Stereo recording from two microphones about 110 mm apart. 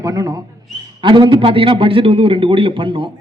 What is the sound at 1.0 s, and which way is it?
A man's voice, 50° right (ahead or behind).